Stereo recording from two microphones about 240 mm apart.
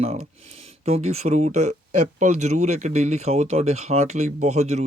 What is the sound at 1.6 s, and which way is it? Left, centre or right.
Speech, right.